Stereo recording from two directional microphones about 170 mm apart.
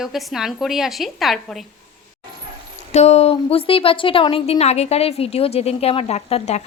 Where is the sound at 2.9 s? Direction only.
40° left (ahead or behind).